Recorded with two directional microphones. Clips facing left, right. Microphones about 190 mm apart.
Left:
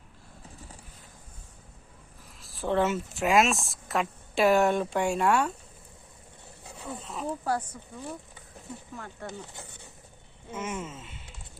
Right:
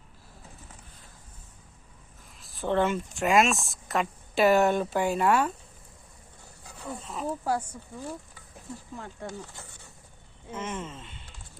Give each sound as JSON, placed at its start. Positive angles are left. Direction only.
{"t": 2.4, "sound": "speech", "side_deg": 0}
{"t": 6.8, "sound": "speech", "side_deg": 0}
{"t": 7.4, "sound": "speech", "side_deg": -10}
{"t": 9.2, "sound": "speech", "side_deg": 20}
{"t": 10.5, "sound": "speech", "side_deg": 10}